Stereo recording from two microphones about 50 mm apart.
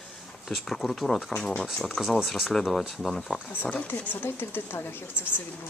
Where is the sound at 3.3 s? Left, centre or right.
Right.